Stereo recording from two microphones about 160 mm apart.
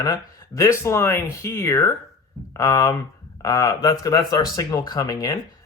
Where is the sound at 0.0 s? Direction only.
20° left (ahead or behind).